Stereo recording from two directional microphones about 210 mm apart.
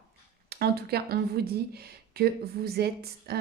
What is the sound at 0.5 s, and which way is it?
Speech, 50° right (ahead or behind).